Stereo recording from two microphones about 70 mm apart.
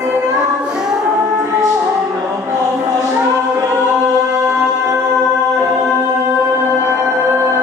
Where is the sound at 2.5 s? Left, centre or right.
Right.